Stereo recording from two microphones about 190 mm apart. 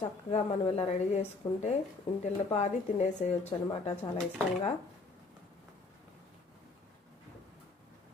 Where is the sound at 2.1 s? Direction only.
35° left (ahead or behind).